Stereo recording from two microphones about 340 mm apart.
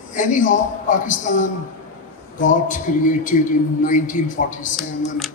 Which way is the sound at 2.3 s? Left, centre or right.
Left.